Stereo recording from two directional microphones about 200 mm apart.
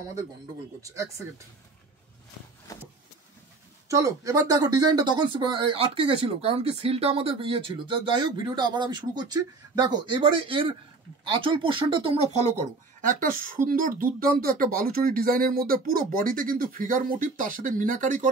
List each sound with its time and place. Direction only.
0.8 s speech: 15° right (ahead or behind)
2.7 s a sound: 15° left (ahead or behind)
3.9 s speech: 15° right (ahead or behind)
13.2 s speech: 45° right (ahead or behind)